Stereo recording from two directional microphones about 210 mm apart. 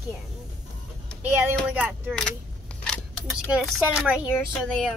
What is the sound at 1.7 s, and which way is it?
Speech, 5° right (ahead or behind).